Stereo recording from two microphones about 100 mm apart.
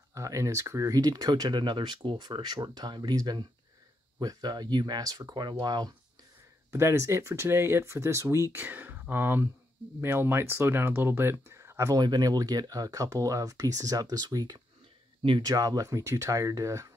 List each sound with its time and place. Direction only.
0.1 s speech: 30° right (ahead or behind)
6.7 s speech: 25° right (ahead or behind)